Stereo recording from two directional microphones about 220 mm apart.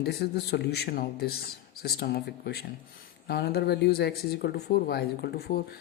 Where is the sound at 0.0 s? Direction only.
45° left (ahead or behind).